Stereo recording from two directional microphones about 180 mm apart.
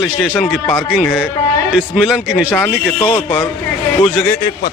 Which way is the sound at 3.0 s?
30° left (ahead or behind).